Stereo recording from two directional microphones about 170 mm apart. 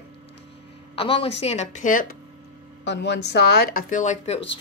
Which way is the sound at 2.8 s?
90° left.